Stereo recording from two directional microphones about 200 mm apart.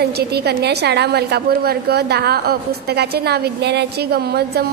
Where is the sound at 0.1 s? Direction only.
55° right (ahead or behind).